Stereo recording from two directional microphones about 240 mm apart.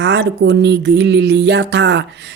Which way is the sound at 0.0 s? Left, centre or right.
Right.